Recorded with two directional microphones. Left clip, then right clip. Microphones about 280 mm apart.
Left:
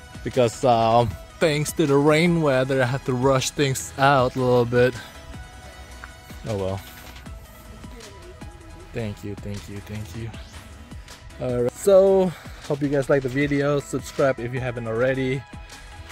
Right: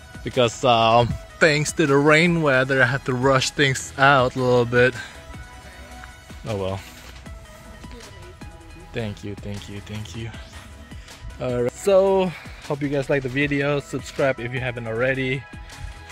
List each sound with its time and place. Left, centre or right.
0.2 s speech: centre
6.4 s speech: centre
8.9 s speech: centre
11.3 s speech: centre
11.8 s speech: centre